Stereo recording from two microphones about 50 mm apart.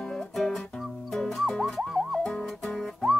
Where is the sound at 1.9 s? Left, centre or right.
Centre.